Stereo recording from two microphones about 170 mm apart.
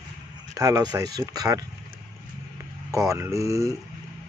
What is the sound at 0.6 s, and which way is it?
Speech, 20° right (ahead or behind).